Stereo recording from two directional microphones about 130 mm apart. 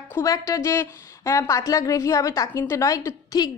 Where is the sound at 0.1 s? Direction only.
25° left (ahead or behind).